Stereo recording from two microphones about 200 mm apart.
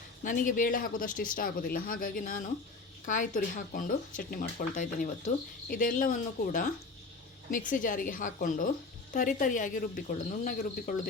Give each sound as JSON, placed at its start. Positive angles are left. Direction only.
{"t": 0.2, "sound": "speech", "side_deg": 40}